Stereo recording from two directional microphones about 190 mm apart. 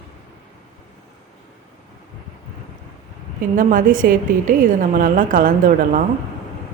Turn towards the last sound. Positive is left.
turn(degrees=-45)  # may be behind; listen again after turning